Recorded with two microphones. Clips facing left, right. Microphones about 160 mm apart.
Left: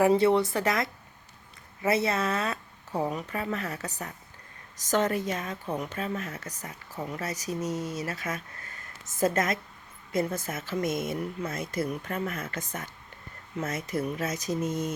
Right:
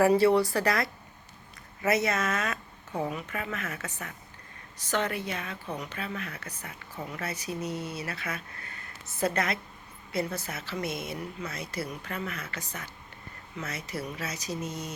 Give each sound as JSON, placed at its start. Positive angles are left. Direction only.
{"t": 0.0, "sound": "speech", "side_deg": 20}